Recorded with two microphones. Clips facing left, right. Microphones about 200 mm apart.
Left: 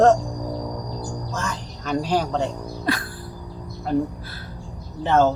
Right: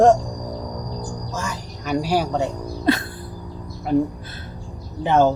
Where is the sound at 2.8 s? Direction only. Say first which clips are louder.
Right 6 dB; 25° right (ahead or behind).